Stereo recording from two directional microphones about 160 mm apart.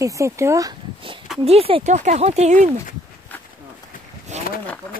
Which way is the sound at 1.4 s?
40° right (ahead or behind).